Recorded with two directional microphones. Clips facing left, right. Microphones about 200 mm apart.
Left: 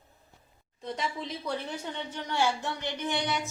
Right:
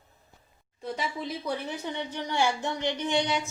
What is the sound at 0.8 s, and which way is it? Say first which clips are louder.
A woman's voice: right 2 dB; 5° right (ahead or behind).